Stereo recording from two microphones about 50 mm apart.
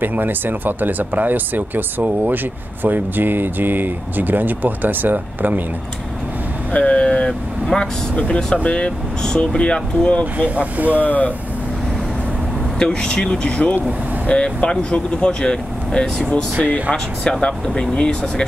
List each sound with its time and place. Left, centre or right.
0.0 s speech: right
6.7 s vehicle: left
7.6 s speech: centre
10.3 s speech: right
11.1 s speech: left
12.7 s speech: centre
17.2 s speech: centre